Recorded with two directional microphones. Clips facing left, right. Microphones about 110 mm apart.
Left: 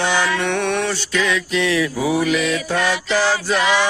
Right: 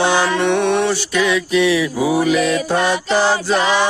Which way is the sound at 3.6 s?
35° right (ahead or behind).